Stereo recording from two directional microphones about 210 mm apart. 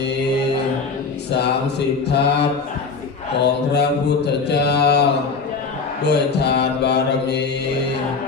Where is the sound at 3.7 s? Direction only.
50° left (ahead or behind).